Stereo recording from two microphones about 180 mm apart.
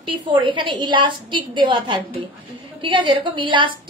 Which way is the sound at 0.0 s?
25° right (ahead or behind).